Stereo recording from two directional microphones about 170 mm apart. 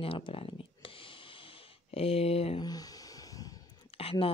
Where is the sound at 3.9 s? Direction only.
35° left (ahead or behind).